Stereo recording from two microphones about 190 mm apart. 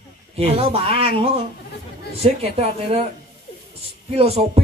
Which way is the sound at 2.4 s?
35° right (ahead or behind).